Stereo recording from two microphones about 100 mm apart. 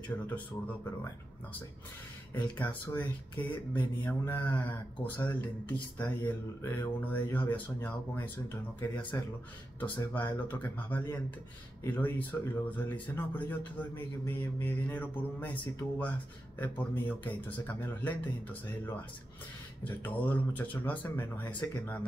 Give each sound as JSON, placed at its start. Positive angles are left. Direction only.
{"t": 2.5, "sound": "speech", "side_deg": 20}
{"t": 19.8, "sound": "speech", "side_deg": 15}